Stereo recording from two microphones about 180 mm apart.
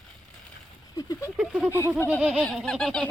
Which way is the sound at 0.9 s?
20° left (ahead or behind).